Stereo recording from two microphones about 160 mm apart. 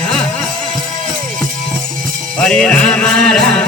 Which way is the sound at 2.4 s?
5° left (ahead or behind).